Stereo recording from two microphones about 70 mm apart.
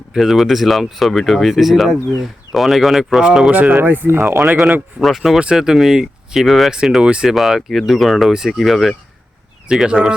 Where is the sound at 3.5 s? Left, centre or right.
Right.